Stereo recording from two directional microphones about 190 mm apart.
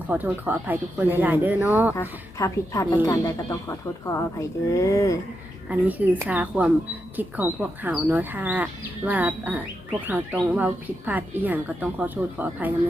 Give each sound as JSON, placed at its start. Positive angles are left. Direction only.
{"t": 0.1, "sound": "speech", "side_deg": -10}
{"t": 2.0, "sound": "a woman's voice", "side_deg": 15}
{"t": 5.6, "sound": "speech", "side_deg": -10}